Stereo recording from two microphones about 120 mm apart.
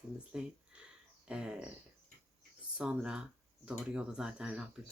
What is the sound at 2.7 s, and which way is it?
Speech, 5° right (ahead or behind).